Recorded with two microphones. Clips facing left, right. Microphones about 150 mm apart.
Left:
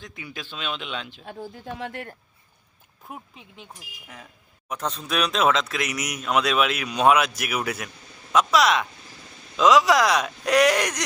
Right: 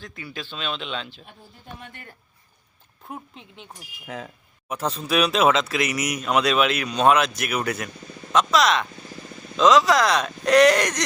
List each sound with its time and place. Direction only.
0.0 s speech: 15° left (ahead or behind)
1.2 s speech: 90° left
3.1 s speech: centre (ahead or behind)
4.7 s speech: 5° right (ahead or behind)